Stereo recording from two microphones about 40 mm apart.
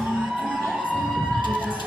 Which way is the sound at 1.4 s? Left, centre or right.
Right.